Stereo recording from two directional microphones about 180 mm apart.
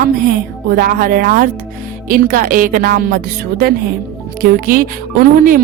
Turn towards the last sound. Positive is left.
turn(degrees=-50)  # may be behind; listen again after turning